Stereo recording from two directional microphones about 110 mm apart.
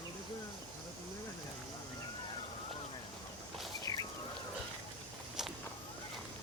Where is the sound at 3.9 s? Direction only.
30° left (ahead or behind).